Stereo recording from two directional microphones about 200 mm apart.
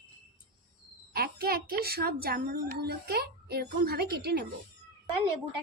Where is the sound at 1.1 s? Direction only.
50° right (ahead or behind).